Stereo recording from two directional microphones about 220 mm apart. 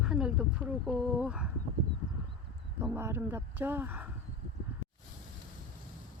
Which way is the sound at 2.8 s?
10° right (ahead or behind).